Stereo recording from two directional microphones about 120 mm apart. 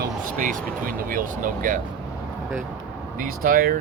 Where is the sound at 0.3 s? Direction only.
90° right.